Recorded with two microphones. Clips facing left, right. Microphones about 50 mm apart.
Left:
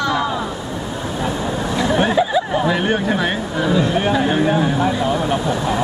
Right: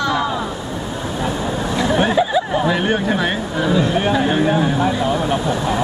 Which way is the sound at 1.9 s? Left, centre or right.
Centre.